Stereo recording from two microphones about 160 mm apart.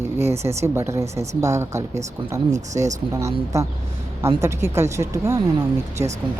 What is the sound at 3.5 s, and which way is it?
A woman's voice, 20° right (ahead or behind).